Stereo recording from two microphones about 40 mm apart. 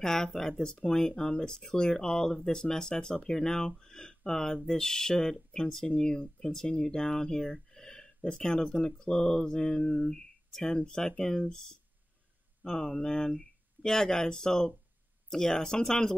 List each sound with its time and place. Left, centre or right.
0.0 s speech: centre
7.7 s a sound: centre
8.2 s speech: centre
12.6 s speech: centre